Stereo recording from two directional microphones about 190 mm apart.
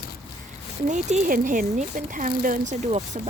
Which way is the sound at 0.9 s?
40° right (ahead or behind).